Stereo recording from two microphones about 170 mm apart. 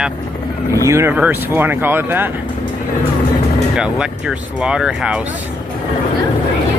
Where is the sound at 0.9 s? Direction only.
15° right (ahead or behind).